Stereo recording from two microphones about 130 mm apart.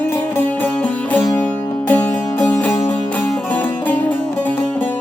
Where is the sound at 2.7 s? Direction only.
25° left (ahead or behind).